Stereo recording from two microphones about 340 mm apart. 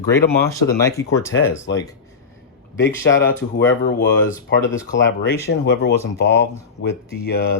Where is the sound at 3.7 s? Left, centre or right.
Left.